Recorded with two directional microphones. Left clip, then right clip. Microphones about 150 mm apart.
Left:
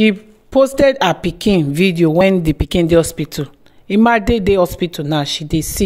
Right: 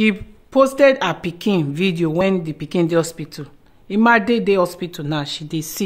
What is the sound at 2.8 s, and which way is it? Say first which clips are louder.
Speech: left 4 dB; 35° left (ahead or behind).